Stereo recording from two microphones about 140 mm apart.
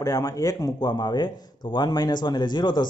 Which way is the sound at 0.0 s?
25° left (ahead or behind).